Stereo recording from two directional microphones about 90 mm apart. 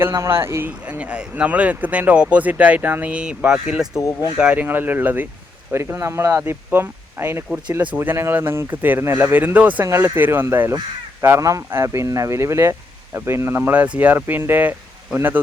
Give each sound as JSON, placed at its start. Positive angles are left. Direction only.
{"t": 0.0, "sound": "speech", "side_deg": -30}
{"t": 0.9, "sound": "speech", "side_deg": -15}
{"t": 5.7, "sound": "speech", "side_deg": -30}